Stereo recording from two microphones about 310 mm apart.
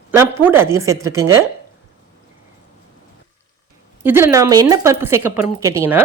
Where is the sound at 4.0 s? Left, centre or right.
Centre.